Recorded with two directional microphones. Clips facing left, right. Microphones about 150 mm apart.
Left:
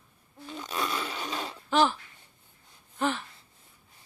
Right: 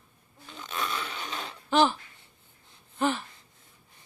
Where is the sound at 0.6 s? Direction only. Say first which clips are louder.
Left 1 dB; 35° left (ahead or behind).